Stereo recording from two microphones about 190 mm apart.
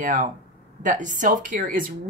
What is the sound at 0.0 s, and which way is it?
Speech, 45° right (ahead or behind).